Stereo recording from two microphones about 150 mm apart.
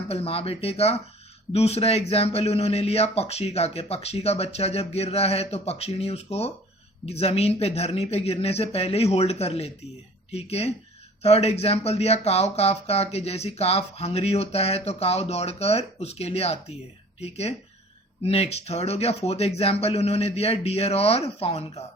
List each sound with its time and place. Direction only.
0.1 s speech: 40° left (ahead or behind)